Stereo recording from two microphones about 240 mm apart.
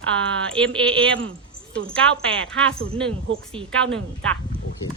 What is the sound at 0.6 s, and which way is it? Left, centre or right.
Speech, centre.